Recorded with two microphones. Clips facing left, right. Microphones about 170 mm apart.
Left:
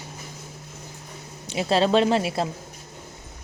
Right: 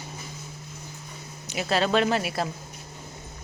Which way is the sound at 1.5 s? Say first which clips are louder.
Left 4 dB; 25° left (ahead or behind).